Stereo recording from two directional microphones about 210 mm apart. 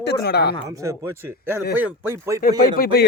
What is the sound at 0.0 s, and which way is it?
Speech, 50° left (ahead or behind).